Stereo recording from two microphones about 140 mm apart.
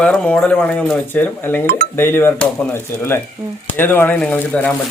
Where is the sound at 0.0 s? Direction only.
10° left (ahead or behind).